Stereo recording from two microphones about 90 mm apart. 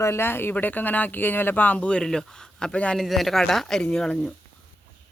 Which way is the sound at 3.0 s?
Centre (ahead or behind).